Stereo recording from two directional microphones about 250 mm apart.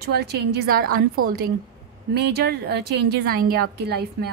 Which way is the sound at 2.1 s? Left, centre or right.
Right.